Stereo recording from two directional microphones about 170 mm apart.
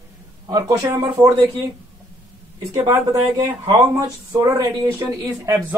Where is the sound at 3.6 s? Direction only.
20° right (ahead or behind).